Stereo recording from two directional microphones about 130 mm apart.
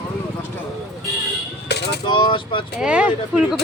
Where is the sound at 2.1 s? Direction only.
35° left (ahead or behind).